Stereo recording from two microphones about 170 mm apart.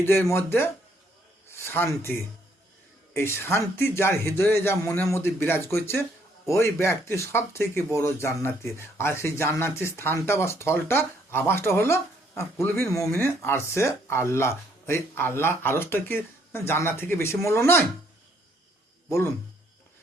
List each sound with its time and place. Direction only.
0.0 s speech: 15° left (ahead or behind)